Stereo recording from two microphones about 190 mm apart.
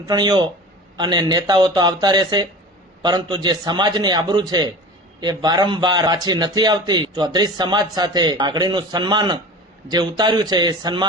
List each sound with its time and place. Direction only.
0.0 s a man's voice: 20° right (ahead or behind)